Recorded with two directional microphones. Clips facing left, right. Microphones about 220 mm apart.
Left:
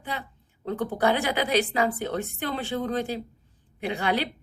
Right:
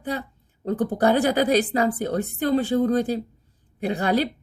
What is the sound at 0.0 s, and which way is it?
A woman's voice, 40° right (ahead or behind).